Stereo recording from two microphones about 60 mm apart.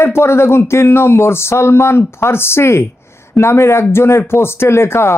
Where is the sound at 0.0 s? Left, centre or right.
Left.